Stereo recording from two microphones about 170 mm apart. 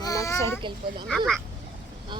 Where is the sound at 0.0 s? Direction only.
20° left (ahead or behind).